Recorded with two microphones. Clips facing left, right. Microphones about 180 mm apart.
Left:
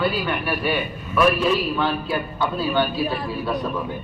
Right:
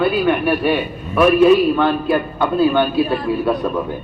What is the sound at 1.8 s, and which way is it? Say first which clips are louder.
A man's voice: right 7 dB; 55° right (ahead or behind).